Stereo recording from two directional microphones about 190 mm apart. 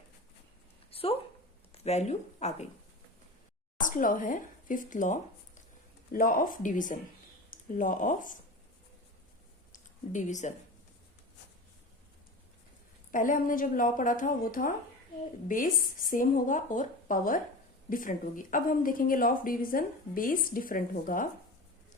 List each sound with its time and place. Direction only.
0.9 s a sound: 30° left (ahead or behind)
1.7 s speech: 35° left (ahead or behind)
3.8 s speech: 45° left (ahead or behind)
9.7 s speech: 40° left (ahead or behind)
13.1 s speech: 45° left (ahead or behind)